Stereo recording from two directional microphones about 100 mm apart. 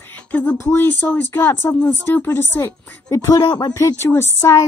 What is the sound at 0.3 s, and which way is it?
Speech, 15° left (ahead or behind).